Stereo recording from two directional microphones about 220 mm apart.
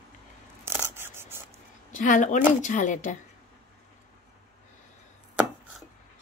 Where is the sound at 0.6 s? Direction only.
10° right (ahead or behind).